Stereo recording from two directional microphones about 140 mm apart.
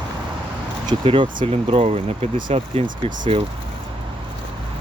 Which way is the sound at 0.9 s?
40° right (ahead or behind).